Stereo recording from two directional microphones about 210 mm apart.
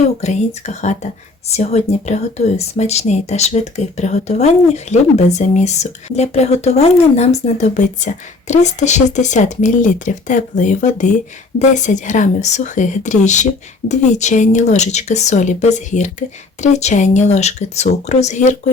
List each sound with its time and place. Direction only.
0.2 s speech: 35° left (ahead or behind)